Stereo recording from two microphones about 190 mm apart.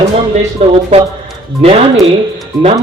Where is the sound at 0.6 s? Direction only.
30° right (ahead or behind).